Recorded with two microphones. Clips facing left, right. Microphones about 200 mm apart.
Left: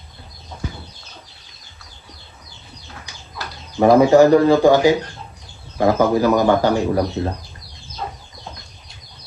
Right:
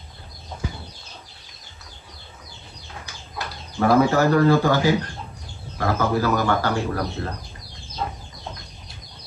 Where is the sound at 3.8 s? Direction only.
15° left (ahead or behind).